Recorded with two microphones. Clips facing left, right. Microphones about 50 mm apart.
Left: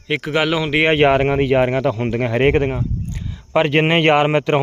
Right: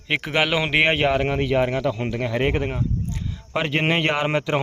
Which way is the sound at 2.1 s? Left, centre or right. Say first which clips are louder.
Left 10 dB; left.